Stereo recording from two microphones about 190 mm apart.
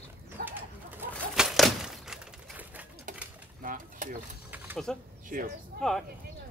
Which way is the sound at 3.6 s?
45° right (ahead or behind).